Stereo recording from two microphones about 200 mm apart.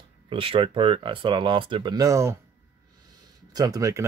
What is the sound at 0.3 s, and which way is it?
Speech, 25° right (ahead or behind).